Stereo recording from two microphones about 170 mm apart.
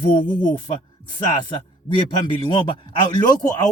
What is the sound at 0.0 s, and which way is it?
Speech, 30° left (ahead or behind).